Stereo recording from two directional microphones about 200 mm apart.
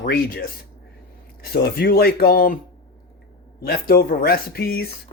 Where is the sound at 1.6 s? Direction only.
50° left (ahead or behind).